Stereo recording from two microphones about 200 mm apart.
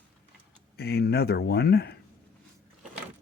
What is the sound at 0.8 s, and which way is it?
Speech, 50° left (ahead or behind).